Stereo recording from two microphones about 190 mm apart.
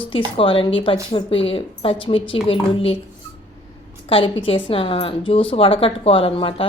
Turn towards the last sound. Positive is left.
turn(degrees=30)  # may be behind; listen again after turning